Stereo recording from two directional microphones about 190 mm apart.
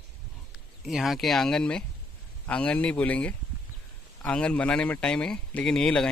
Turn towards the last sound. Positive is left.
turn(degrees=5)  # may be behind; listen again after turning